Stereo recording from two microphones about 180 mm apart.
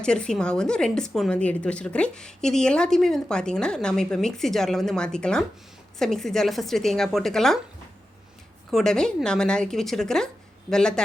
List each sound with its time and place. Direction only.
0.0 s a woman's voice: 5° left (ahead or behind)
8.7 s a woman's voice: 5° left (ahead or behind)